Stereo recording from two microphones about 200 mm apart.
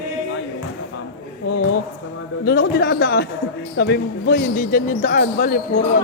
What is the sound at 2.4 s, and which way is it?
Speech, 55° left (ahead or behind).